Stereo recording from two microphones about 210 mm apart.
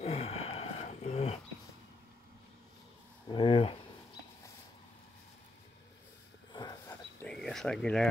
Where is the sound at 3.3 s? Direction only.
25° left (ahead or behind).